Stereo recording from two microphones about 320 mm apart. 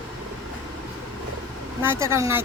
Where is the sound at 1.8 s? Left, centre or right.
Centre.